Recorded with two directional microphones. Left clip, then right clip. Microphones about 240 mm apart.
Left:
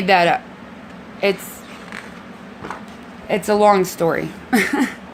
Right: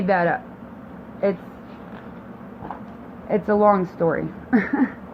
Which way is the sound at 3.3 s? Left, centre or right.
Left.